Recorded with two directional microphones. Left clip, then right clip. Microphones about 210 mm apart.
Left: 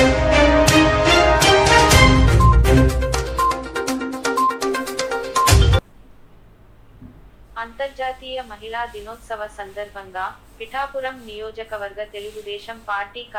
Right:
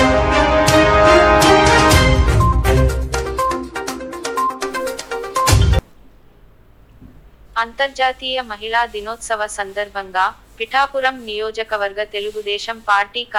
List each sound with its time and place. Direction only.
0.0 s music: centre (ahead or behind)
7.5 s a woman's voice: 60° right (ahead or behind)